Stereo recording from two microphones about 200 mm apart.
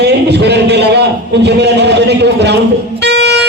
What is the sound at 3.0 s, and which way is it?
Music, 55° right (ahead or behind).